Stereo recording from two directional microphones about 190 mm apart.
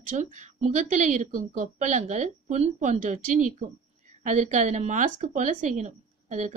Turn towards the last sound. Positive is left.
turn(degrees=-40)  # may be behind; listen again after turning